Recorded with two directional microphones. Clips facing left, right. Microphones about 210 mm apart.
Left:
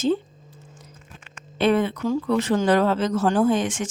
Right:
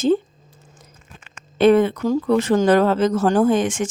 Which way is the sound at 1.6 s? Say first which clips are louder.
Right 6 dB; 45° right (ahead or behind).